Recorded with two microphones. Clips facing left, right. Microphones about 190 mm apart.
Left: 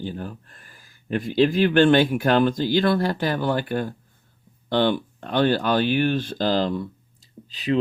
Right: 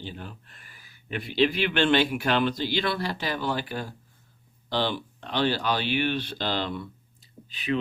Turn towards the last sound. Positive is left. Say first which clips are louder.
# left 5 dB
turn(degrees=40)  # may be behind; listen again after turning